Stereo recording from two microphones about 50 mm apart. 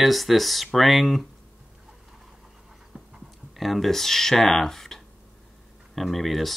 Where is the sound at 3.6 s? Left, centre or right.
Centre.